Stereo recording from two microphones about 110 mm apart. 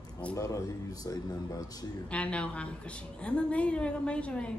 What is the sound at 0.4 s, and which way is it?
Speech, 35° left (ahead or behind).